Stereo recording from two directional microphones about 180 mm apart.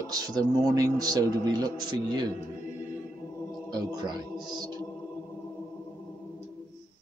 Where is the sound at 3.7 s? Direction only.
25° right (ahead or behind).